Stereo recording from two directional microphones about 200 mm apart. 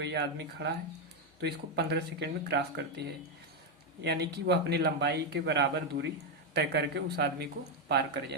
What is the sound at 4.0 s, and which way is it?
Speech, 55° right (ahead or behind).